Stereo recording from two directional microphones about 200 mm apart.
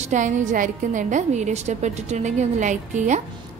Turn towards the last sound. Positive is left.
turn(degrees=-35)  # may be behind; listen again after turning